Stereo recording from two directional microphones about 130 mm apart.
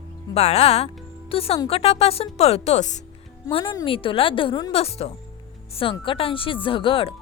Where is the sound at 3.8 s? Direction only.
45° left (ahead or behind).